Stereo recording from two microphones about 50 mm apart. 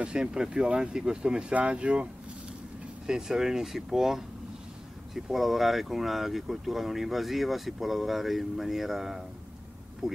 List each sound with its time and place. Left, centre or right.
0.0 s speech: centre
3.1 s speech: centre